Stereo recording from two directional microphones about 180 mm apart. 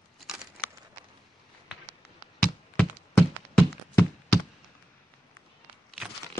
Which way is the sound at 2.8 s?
10° left (ahead or behind).